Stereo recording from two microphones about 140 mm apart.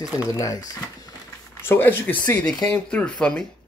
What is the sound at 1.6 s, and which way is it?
Speech, 15° left (ahead or behind).